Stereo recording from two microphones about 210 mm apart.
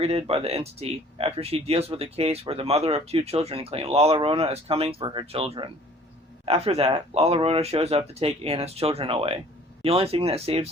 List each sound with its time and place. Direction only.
0.0 s speech: 30° right (ahead or behind)